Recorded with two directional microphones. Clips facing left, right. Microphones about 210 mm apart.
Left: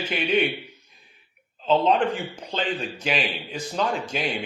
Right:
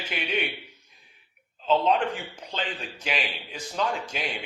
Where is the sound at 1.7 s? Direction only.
35° left (ahead or behind).